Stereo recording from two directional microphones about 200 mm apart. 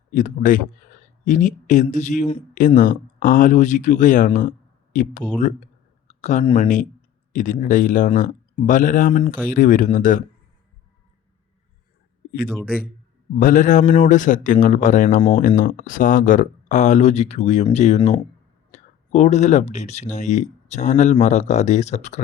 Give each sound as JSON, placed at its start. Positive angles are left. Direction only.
{"t": 0.1, "sound": "speech", "side_deg": 40}
{"t": 6.1, "sound": "a sound", "side_deg": 35}
{"t": 6.6, "sound": "speech", "side_deg": 40}
{"t": 12.5, "sound": "a man's voice", "side_deg": 0}
{"t": 13.4, "sound": "speech", "side_deg": 40}